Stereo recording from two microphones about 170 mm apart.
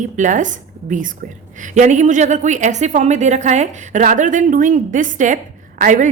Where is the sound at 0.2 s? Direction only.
50° right (ahead or behind).